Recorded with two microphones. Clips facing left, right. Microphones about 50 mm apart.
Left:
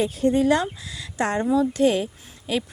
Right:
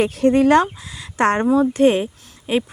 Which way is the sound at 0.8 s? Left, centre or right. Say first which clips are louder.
Right 1 dB; right.